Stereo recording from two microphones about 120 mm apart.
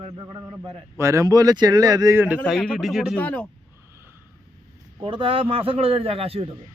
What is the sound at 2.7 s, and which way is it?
Speech, 5° right (ahead or behind).